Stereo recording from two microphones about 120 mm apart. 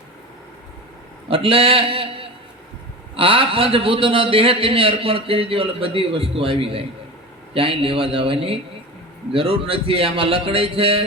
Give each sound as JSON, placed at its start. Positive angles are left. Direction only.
{"t": 1.3, "sound": "a man's voice", "side_deg": -50}